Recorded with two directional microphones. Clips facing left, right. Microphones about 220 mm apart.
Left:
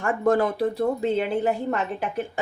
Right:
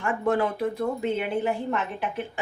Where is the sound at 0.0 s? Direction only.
40° left (ahead or behind).